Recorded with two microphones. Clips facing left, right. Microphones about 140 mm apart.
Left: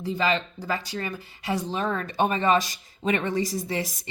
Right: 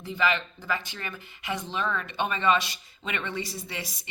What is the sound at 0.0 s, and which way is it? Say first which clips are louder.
Speech: left 2 dB; 35° left (ahead or behind).